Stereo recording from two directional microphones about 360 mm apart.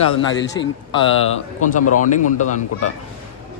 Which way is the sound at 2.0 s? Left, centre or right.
Left.